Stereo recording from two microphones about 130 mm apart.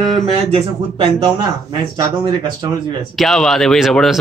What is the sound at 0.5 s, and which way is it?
Speech, 45° right (ahead or behind).